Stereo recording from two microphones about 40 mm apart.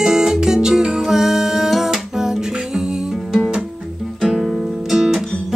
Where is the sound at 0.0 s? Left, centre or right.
Centre.